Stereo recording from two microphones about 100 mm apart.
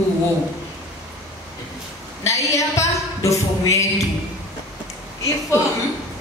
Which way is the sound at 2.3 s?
30° left (ahead or behind).